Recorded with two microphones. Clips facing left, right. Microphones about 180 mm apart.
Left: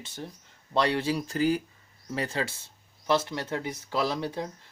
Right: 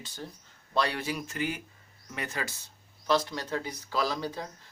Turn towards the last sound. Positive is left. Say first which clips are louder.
# left 2 dB
turn(degrees=25)  # may be behind; listen again after turning